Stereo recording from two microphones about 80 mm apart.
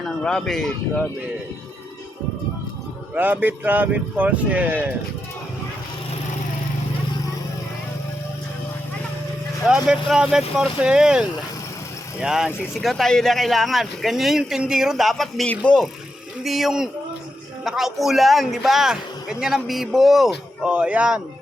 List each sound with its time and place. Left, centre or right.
0.0 s speech: centre
3.2 s speech: right
9.6 s a man's voice: centre
15.4 s speech: centre
16.4 s a man's voice: centre
20.7 s speech: centre